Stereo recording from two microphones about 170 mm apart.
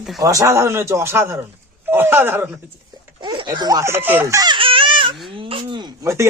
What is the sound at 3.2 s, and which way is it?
Speech, 30° right (ahead or behind).